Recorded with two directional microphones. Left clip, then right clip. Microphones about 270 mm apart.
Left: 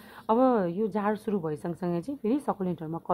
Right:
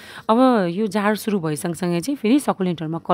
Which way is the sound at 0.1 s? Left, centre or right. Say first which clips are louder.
Right 7 dB; right.